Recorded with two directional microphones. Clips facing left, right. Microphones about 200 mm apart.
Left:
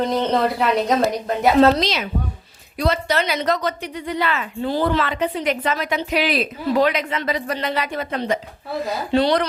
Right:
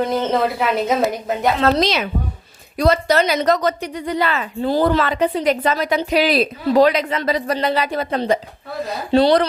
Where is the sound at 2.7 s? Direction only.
40° right (ahead or behind).